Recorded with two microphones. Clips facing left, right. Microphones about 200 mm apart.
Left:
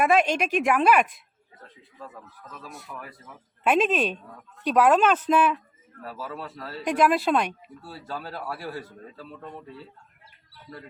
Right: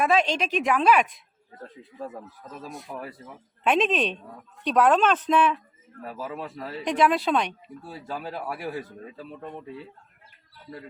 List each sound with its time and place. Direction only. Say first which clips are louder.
0.0 s a woman's voice: left 1 dB; 10° left (ahead or behind)
2.1 s speech: right 5 dB; 40° right (ahead or behind)
2.9 s speech: right 5 dB; 30° right (ahead or behind)
3.6 s speech: left 1 dB; 5° left (ahead or behind)
6.1 s speech: right 2 dB; 15° right (ahead or behind)
6.8 s speech: left 1 dB; 5° left (ahead or behind)
7.8 s speech: right 2 dB; 15° right (ahead or behind)